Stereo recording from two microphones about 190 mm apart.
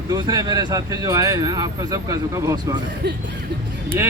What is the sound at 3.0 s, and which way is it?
Music, 60° right (ahead or behind).